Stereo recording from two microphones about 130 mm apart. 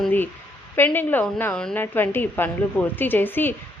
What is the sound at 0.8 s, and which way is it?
A woman's voice, 15° left (ahead or behind).